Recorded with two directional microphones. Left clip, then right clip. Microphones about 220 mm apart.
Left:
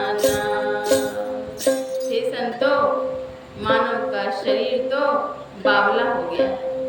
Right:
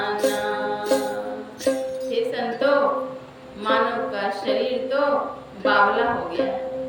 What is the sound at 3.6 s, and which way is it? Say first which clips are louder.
A capella: left 1 dB; 5° left (ahead or behind).